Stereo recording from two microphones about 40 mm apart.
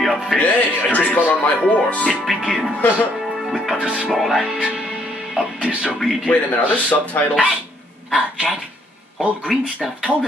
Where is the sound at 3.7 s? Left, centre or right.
Right.